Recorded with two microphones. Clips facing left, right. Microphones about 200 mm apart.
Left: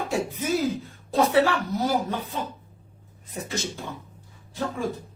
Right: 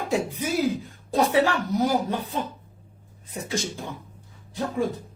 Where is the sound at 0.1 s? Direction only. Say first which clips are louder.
Right 1 dB; 15° right (ahead or behind).